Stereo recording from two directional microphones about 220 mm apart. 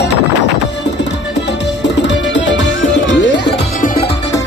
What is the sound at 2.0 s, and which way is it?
Music, 55° left (ahead or behind).